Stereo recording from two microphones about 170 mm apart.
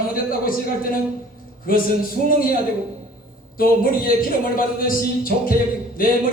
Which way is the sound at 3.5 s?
55° left (ahead or behind).